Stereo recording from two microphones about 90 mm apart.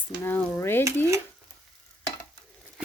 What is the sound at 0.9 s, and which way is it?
Stir, 30° right (ahead or behind).